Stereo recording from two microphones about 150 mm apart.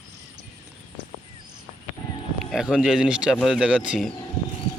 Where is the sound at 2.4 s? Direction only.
Centre (ahead or behind).